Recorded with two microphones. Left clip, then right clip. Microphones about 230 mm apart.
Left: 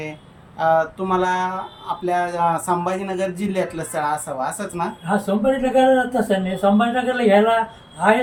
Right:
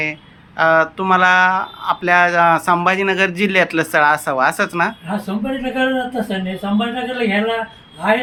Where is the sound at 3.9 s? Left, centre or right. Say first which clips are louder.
Right 8 dB; right.